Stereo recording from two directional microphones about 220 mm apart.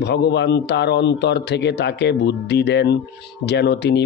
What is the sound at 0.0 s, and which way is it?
Speech, 50° left (ahead or behind).